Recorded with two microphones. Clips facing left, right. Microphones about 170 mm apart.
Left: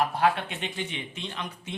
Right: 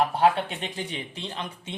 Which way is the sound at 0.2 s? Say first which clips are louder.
Right 3 dB; 35° right (ahead or behind).